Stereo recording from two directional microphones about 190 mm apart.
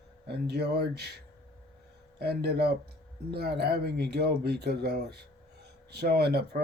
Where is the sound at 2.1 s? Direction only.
55° right (ahead or behind).